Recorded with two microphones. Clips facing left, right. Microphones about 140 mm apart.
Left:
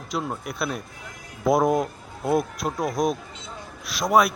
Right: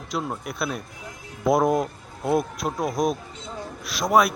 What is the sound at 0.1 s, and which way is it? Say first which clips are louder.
A man's voice: even; centre (ahead or behind).